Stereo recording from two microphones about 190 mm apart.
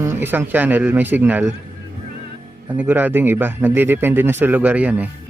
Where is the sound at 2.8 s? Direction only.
10° right (ahead or behind).